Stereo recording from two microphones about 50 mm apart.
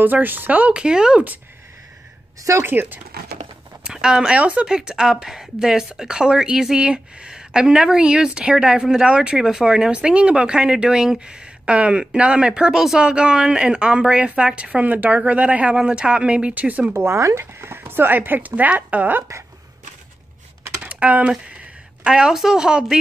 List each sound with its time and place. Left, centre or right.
0.0 s speech: right
0.7 s speech: centre
2.6 s speech: right
3.8 s speech: centre
4.4 s a woman's voice: right
4.6 s a woman's voice: centre
16.5 s speech: right
16.9 s speech: right
20.8 s typing: right
22.0 s speech: centre